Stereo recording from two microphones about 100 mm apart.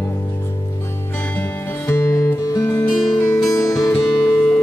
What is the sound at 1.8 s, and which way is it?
Music, 25° left (ahead or behind).